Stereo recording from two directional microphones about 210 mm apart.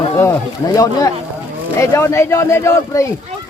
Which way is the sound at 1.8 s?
15° left (ahead or behind).